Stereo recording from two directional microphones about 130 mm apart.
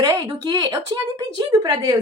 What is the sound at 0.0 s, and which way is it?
A woman's voice, 25° right (ahead or behind).